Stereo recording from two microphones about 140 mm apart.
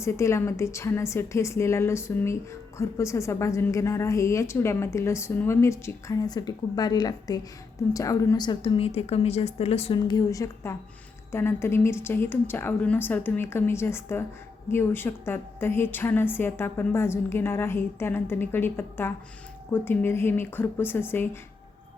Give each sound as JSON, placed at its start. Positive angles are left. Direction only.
{"t": 0.0, "sound": "a woman's voice", "side_deg": 20}
{"t": 10.1, "sound": "a woman's voice", "side_deg": 25}